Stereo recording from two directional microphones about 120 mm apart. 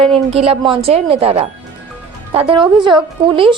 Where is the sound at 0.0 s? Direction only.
50° right (ahead or behind).